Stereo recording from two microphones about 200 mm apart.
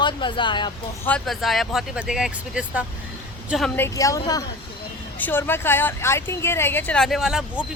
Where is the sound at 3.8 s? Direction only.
15° left (ahead or behind); by 7.6 s centre (ahead or behind).